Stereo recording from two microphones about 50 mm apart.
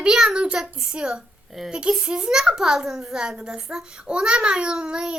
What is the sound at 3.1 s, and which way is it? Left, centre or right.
A child's voice, centre.